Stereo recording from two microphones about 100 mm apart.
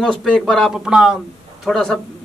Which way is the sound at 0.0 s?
5° left (ahead or behind).